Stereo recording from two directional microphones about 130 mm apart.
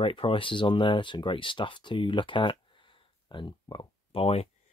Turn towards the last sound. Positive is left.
turn(degrees=50)  # may be behind; listen again after turning